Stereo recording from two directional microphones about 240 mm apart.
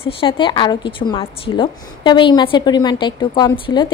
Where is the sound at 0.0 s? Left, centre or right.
Left.